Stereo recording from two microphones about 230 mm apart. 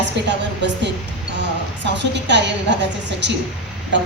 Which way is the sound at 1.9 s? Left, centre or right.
Right.